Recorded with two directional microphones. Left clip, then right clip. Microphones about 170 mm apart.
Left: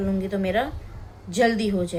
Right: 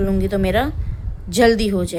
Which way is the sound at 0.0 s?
75° right (ahead or behind).